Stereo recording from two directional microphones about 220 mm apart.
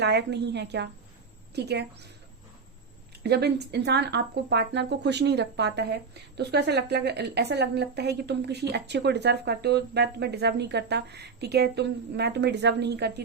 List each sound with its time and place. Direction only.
0.0 s speech: 50° right (ahead or behind)
3.2 s speech: 50° right (ahead or behind)